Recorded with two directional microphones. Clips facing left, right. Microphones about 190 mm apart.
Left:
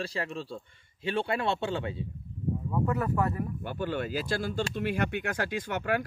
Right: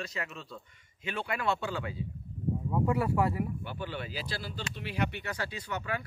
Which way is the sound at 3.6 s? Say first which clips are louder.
Left 6 dB; 50° left (ahead or behind).